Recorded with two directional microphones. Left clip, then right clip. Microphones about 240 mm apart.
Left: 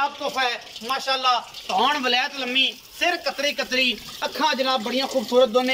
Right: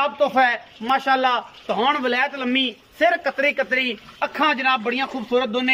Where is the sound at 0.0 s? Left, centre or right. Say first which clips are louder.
Right 6 dB; right.